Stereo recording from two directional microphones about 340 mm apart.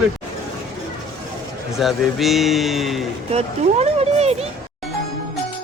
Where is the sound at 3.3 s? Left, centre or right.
Centre.